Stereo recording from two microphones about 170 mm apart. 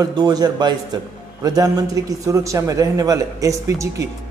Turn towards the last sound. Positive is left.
turn(degrees=-20)  # may be behind; listen again after turning